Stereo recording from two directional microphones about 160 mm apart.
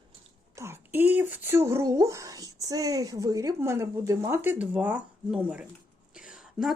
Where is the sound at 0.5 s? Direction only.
15° right (ahead or behind).